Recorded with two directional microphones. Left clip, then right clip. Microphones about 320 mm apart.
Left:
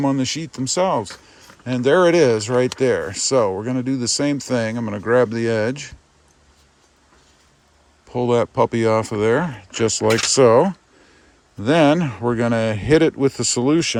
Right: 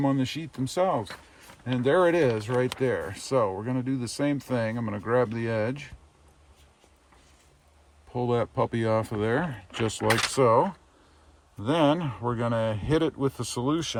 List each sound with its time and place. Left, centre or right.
0.0 s speech: centre
8.1 s speech: centre
13.7 s speech: left